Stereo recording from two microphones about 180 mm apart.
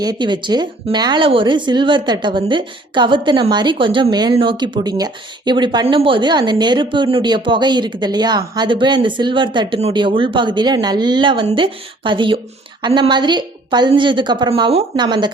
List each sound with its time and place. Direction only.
0.0 s speech: 25° right (ahead or behind)